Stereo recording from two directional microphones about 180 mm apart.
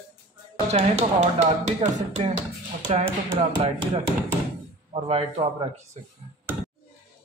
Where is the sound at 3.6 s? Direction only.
30° right (ahead or behind).